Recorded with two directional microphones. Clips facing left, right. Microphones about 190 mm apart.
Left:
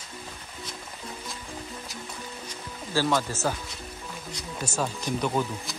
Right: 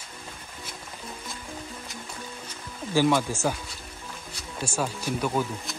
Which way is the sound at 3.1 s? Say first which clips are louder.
Right 2 dB; 15° right (ahead or behind).